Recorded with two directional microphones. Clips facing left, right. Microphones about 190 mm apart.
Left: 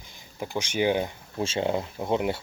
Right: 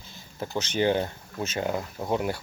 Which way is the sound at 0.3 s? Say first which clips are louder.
Even; 15° left (ahead or behind).